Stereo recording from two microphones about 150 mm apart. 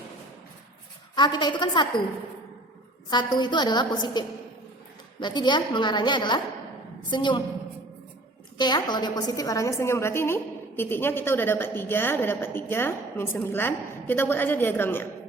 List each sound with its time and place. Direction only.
1.1 s a woman's voice: 30° left (ahead or behind)
3.1 s a woman's voice: 30° left (ahead or behind)
8.5 s a woman's voice: 30° left (ahead or behind); by 15.0 s 15° left (ahead or behind)